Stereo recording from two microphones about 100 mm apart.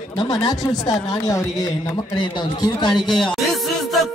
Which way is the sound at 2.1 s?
50° left (ahead or behind).